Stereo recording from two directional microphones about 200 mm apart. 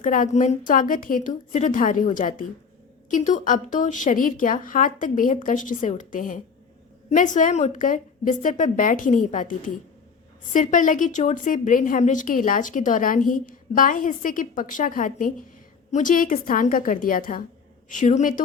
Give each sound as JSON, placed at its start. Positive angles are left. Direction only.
{"t": 0.0, "sound": "a woman's voice", "side_deg": 40}